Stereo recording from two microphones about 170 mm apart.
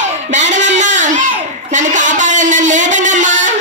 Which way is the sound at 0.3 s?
45° right (ahead or behind).